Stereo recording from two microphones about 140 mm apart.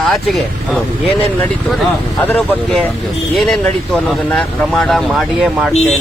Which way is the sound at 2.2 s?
15° left (ahead or behind).